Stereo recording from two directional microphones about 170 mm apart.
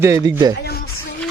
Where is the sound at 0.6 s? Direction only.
70° left (ahead or behind).